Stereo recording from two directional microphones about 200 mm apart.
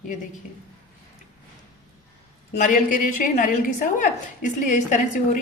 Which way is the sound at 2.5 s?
40° left (ahead or behind).